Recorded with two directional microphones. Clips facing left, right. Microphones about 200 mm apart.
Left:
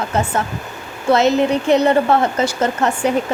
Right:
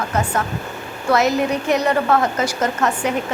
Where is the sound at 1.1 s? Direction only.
25° left (ahead or behind).